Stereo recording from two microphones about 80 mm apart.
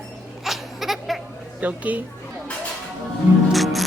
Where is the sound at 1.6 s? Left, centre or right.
Centre.